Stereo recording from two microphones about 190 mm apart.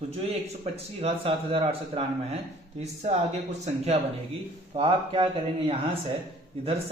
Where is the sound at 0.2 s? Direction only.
30° right (ahead or behind).